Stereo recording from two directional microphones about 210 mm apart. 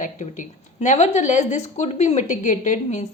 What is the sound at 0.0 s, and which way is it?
A woman's voice, 35° left (ahead or behind).